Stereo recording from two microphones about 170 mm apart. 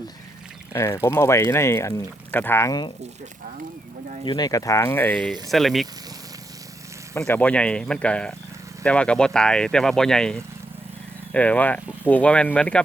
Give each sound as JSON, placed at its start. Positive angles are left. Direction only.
{"t": 0.7, "sound": "speech", "side_deg": 15}
{"t": 4.3, "sound": "speech", "side_deg": 25}
{"t": 7.2, "sound": "speech", "side_deg": 10}